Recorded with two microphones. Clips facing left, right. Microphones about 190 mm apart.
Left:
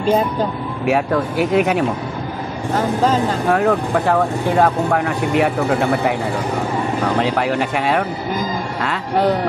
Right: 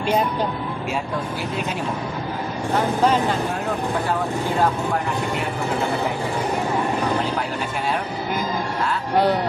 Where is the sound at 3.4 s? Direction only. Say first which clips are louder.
Left 8 dB; 85° left.